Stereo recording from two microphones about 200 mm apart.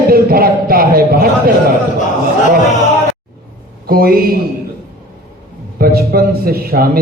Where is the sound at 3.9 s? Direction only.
50° right (ahead or behind).